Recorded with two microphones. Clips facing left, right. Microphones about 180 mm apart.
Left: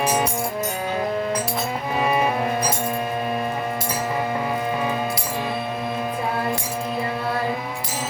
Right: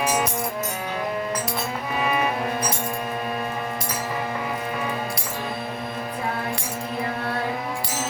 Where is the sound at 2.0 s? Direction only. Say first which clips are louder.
Left 3 dB; 30° left (ahead or behind).